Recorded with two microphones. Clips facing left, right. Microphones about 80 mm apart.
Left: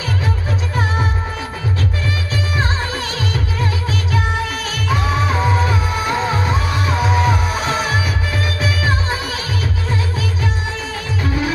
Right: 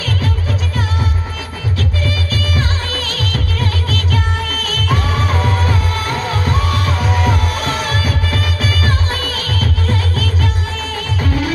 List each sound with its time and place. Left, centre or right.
1.8 s music: left